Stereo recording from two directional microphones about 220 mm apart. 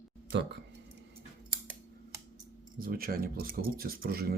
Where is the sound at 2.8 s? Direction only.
40° right (ahead or behind).